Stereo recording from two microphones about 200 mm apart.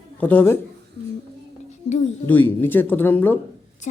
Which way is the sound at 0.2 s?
10° left (ahead or behind).